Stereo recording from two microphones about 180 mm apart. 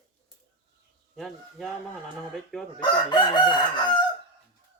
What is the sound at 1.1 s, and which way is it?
Speech, centre (ahead or behind).